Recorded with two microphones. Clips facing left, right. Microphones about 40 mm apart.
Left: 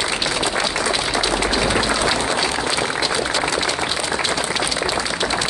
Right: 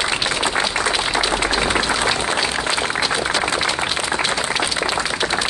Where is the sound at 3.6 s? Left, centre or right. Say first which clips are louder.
Right 1 dB; right.